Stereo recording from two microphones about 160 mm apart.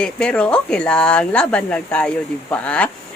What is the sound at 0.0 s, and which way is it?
Speech, 5° left (ahead or behind).